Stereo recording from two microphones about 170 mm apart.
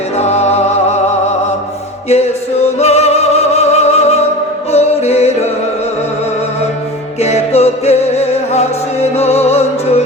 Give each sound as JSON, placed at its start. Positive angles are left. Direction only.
{"t": 0.2, "sound": "music", "side_deg": 40}
{"t": 2.0, "sound": "music", "side_deg": 40}
{"t": 7.2, "sound": "music", "side_deg": 40}